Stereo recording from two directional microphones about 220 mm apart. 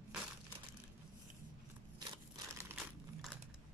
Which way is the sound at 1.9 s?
20° right (ahead or behind).